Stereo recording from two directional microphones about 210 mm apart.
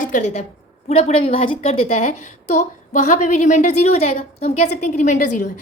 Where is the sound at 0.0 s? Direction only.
35° left (ahead or behind).